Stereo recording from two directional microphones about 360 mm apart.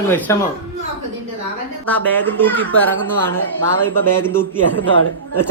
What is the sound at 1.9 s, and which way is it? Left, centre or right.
Speech, centre.